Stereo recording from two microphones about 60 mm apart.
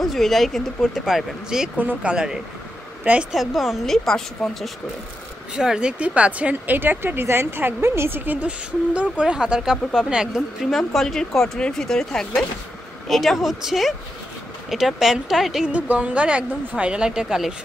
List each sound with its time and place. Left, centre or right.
0.0 s speech: centre
3.0 s speech: right
3.3 s speech: centre
5.6 s speech: centre; by 8.2 s right
8.3 s speech: right
10.6 s speech: centre
15.7 s speech: right